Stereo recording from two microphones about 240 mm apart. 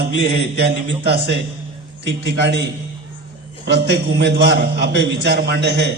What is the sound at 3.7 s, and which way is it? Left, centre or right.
A man's voice, right.